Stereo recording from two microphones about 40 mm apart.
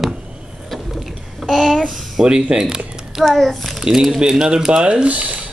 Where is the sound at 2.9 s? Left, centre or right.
Centre.